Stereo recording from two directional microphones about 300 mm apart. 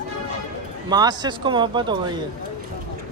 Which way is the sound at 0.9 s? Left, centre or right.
Centre.